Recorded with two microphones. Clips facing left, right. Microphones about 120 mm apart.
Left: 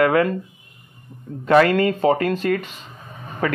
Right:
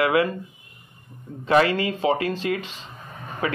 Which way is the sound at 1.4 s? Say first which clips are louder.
Left 4 dB; 50° left (ahead or behind).